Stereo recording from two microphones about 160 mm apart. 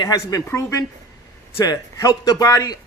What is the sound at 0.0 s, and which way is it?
Speech, 25° left (ahead or behind).